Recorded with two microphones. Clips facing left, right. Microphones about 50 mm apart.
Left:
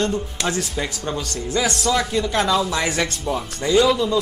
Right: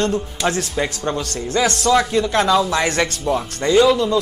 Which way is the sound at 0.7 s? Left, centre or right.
Centre.